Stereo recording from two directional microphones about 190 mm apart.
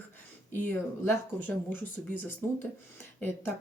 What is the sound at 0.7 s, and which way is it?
A woman's voice, 10° left (ahead or behind).